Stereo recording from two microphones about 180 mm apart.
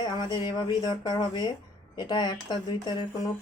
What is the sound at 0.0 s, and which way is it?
Speech, 25° left (ahead or behind).